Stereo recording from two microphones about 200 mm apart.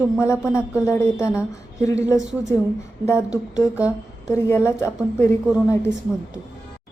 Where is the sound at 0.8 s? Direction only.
15° left (ahead or behind).